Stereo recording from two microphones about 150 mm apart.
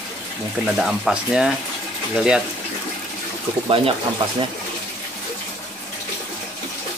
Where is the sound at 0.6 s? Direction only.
Centre (ahead or behind).